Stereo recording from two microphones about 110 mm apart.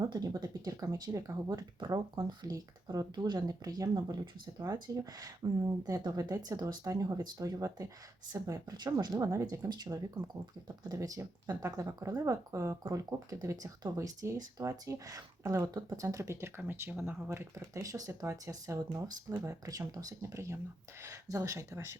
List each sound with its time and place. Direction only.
0.0 s speech: 35° right (ahead or behind)